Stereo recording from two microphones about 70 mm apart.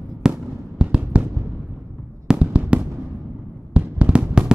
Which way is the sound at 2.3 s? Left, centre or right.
Centre.